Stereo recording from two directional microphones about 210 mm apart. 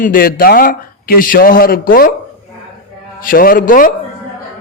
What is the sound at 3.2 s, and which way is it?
Speech, 45° left (ahead or behind).